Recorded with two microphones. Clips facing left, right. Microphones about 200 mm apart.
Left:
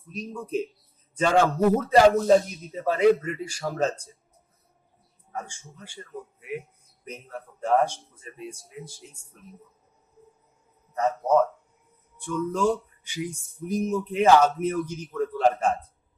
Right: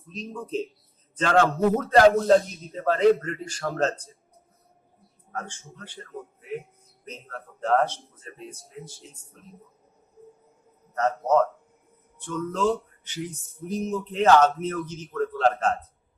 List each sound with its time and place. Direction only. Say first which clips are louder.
0.1 s speech: left 1 dB; 10° left (ahead or behind)
5.3 s speech: right 1 dB; 10° left (ahead or behind)
12.2 s speech: left 1 dB; 10° left (ahead or behind)